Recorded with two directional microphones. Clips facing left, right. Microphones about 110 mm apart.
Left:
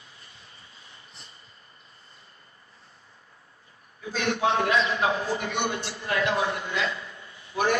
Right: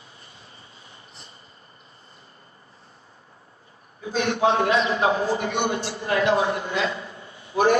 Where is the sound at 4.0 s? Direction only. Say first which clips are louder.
Right 4 dB; 25° right (ahead or behind).